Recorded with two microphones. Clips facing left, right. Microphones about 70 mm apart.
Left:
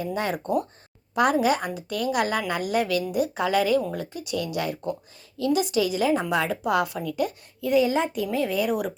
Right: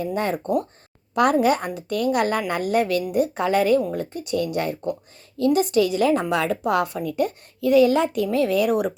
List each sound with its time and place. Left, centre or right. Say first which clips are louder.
0.0 s a woman's voice: right 3 dB; right
6.6 s a woman's voice: right 2 dB; right
7.6 s a woman's voice: right 5 dB; right